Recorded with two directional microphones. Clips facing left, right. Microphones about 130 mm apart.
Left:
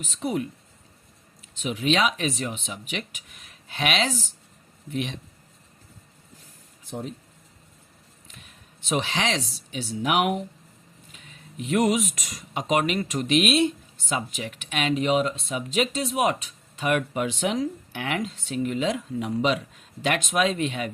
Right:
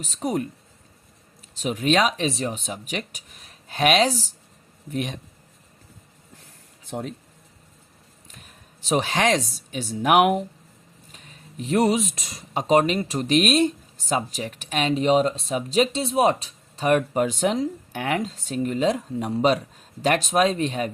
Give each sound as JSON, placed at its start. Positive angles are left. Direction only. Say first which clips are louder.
{"t": 0.0, "sound": "speech", "louder": "right 2 dB", "side_deg": -40}
{"t": 8.3, "sound": "speech", "louder": "right 1 dB", "side_deg": -40}